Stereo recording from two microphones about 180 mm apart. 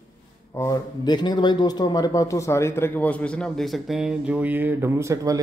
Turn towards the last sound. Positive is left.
turn(degrees=-20)  # may be behind; listen again after turning